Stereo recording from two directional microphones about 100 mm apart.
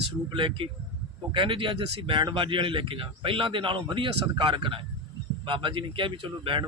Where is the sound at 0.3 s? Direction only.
60° right (ahead or behind).